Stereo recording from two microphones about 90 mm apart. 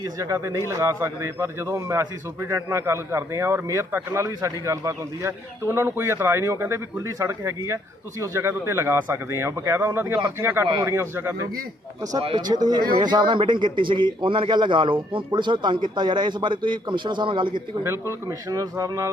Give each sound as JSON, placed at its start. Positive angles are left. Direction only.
{"t": 0.0, "sound": "a man's voice", "side_deg": -35}
{"t": 12.4, "sound": "speech", "side_deg": -50}
{"t": 18.3, "sound": "a man's voice", "side_deg": -40}